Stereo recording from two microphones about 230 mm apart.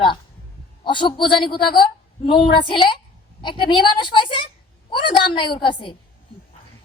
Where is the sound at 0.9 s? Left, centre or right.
Left.